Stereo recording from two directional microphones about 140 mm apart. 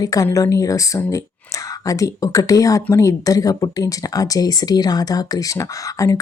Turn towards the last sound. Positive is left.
turn(degrees=25)  # may be behind; listen again after turning